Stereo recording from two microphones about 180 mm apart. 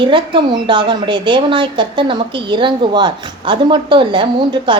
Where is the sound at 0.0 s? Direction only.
25° right (ahead or behind).